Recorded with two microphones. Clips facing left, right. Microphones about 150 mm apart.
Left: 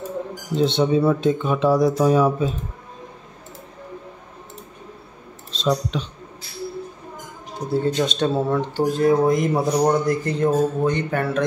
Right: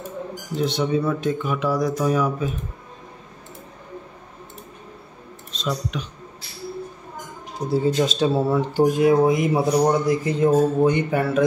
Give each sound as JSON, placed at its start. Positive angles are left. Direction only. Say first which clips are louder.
{"t": 0.6, "sound": "speech", "louder": "left 4 dB", "side_deg": 25}
{"t": 5.5, "sound": "speech", "louder": "left 5 dB", "side_deg": 30}
{"t": 7.7, "sound": "speech", "louder": "right 1 dB", "side_deg": 0}